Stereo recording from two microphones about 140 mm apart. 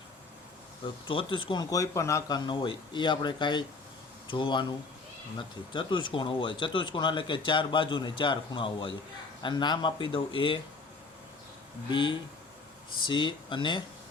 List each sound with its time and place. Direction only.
1.0 s speech: 40° left (ahead or behind)
11.9 s speech: 35° left (ahead or behind)